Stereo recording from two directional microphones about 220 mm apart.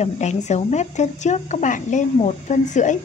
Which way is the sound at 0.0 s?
30° left (ahead or behind).